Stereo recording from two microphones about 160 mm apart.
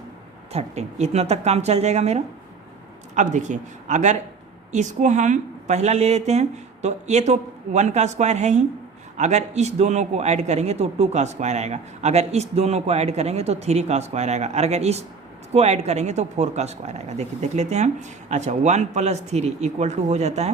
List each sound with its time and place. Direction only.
0.5 s a man's voice: 45° right (ahead or behind)